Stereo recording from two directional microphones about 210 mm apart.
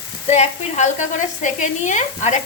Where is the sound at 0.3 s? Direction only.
35° left (ahead or behind).